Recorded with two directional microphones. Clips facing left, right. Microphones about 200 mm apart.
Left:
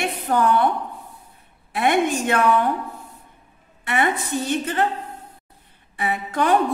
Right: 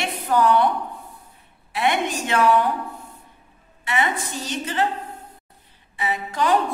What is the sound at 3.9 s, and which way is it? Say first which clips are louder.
A woman's voice: left 2 dB; 55° left (ahead or behind).